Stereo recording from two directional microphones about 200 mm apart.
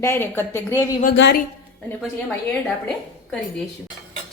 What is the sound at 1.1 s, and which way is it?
Speech, 60° left (ahead or behind).